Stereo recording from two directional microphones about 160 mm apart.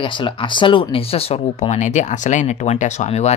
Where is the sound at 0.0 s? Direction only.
30° left (ahead or behind).